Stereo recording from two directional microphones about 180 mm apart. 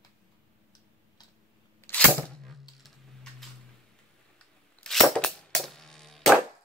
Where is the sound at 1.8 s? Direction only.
10° left (ahead or behind).